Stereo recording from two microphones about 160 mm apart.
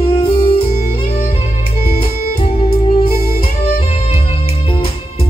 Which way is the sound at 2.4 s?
35° left (ahead or behind).